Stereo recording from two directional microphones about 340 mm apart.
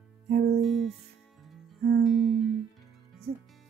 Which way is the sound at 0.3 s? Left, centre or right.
Right.